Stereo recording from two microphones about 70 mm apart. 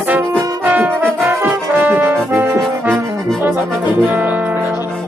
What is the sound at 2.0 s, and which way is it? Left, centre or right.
Brass instrument, right.